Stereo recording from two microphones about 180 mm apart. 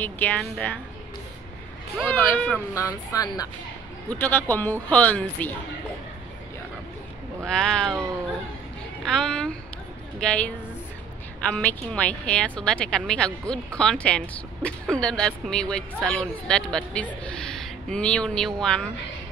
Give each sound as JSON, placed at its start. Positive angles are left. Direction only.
{"t": 0.0, "sound": "speech", "side_deg": 10}
{"t": 2.0, "sound": "speech", "side_deg": 10}
{"t": 3.1, "sound": "speech", "side_deg": 20}
{"t": 4.1, "sound": "speech", "side_deg": 10}
{"t": 7.4, "sound": "speech", "side_deg": 5}
{"t": 9.0, "sound": "speech", "side_deg": 5}